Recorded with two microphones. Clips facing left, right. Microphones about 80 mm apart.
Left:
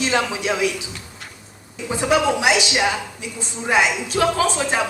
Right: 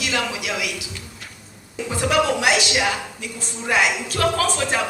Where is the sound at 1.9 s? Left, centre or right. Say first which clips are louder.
Left 2 dB; centre.